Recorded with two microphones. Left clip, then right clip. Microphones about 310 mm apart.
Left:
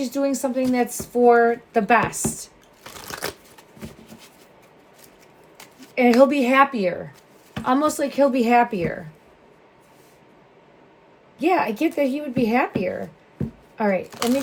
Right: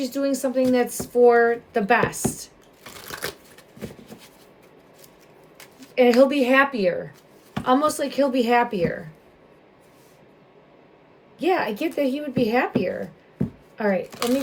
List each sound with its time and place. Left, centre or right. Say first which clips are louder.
0.0 s a woman's voice: left 1 dB; centre
2.8 s a sound: left 2 dB; centre
5.5 s a woman's voice: right 3 dB; centre
11.3 s a woman's voice: left 2 dB; centre